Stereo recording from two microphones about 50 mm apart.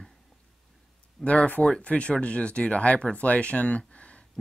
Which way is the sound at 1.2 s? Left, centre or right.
Left.